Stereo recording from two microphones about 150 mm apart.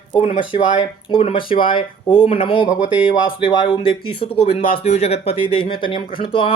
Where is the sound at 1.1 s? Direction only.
40° left (ahead or behind).